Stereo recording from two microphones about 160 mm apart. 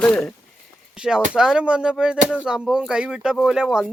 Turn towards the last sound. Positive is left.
turn(degrees=-5)  # may be behind; listen again after turning